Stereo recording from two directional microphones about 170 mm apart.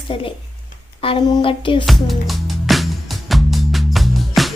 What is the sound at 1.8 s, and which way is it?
Music, centre (ahead or behind).